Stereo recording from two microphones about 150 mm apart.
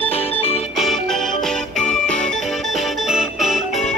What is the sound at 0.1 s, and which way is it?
Music, 45° left (ahead or behind).